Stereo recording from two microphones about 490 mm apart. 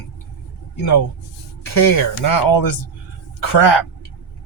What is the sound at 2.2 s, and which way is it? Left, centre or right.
Speech, left.